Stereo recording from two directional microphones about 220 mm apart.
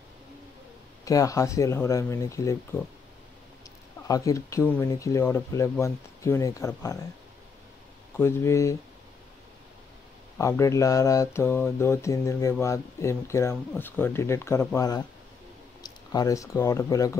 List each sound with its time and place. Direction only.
1.0 s mantra: 15° left (ahead or behind)
4.1 s mantra: 15° left (ahead or behind)
8.2 s mantra: 10° left (ahead or behind)
10.3 s mantra: 10° left (ahead or behind)
15.8 s speech: 15° left (ahead or behind)